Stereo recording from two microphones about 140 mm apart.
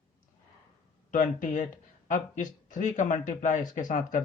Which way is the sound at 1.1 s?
65° left (ahead or behind).